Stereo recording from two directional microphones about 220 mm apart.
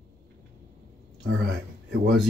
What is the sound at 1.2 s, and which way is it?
Speech, 55° right (ahead or behind).